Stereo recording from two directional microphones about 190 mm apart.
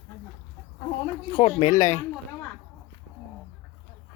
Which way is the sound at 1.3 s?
25° left (ahead or behind).